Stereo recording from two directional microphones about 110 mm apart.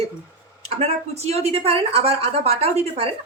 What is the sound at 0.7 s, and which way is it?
Speech, 70° right (ahead or behind).